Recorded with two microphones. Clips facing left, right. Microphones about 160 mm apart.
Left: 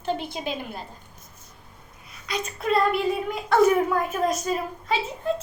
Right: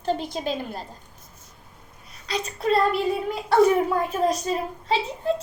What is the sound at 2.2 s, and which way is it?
A child's voice, 35° right (ahead or behind).